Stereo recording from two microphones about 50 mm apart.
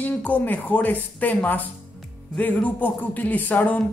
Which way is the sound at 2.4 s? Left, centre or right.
Left.